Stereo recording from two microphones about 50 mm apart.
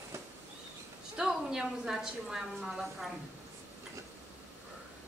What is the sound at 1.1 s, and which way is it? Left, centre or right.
A woman's voice, centre.